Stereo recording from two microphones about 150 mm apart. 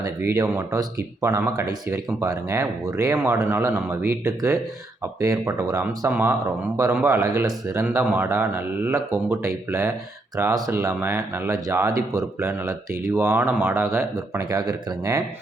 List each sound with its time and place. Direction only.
0.0 s speech: 20° right (ahead or behind)